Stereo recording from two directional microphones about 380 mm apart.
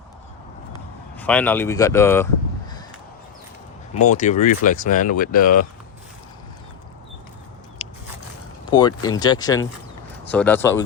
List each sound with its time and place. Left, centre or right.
0.7 s speech: centre
4.1 s speech: centre
7.8 s a sound: centre
8.7 s speech: centre